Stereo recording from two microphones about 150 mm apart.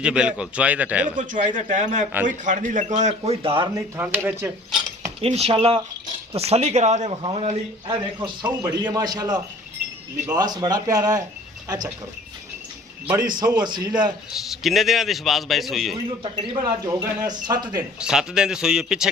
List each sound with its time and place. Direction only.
0.0 s speech: 5° right (ahead or behind)
1.2 s a man's voice: 60° right (ahead or behind); by 3.7 s 35° right (ahead or behind)
3.8 s speech: 10° right (ahead or behind)
5.2 s a man's voice: 40° right (ahead or behind); by 11.2 s 25° right (ahead or behind)
13.1 s a man's voice: 25° right (ahead or behind)
14.3 s a man's voice: centre (ahead or behind)
16.2 s a man's voice: 30° right (ahead or behind)
18.0 s a man's voice: 5° right (ahead or behind)